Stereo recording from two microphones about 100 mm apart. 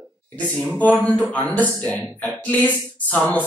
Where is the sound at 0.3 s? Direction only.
15° left (ahead or behind).